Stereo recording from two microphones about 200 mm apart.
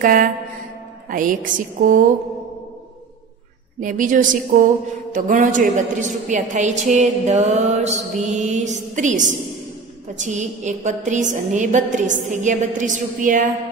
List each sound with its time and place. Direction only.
0.0 s mantra: 45° right (ahead or behind)
1.1 s a woman's voice: 40° right (ahead or behind)
3.8 s a woman's voice: 40° right (ahead or behind)